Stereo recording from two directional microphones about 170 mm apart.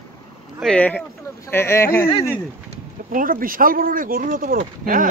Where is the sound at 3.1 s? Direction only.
55° right (ahead or behind).